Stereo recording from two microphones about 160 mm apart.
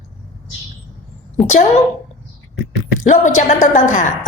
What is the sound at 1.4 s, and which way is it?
Speech, 45° left (ahead or behind).